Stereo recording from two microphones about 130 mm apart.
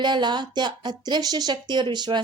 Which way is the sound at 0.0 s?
35° right (ahead or behind).